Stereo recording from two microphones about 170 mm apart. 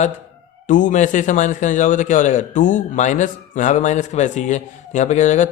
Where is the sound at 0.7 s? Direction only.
50° left (ahead or behind).